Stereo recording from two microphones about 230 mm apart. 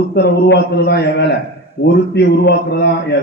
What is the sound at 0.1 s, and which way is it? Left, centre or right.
A man's voice, left.